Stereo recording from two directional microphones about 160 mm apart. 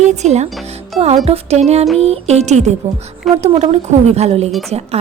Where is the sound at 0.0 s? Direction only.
45° right (ahead or behind).